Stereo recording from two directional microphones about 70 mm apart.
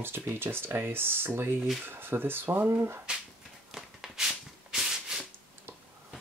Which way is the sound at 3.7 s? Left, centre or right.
Centre.